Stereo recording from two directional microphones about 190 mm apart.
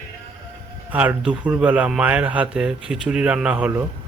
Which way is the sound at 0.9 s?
5° right (ahead or behind).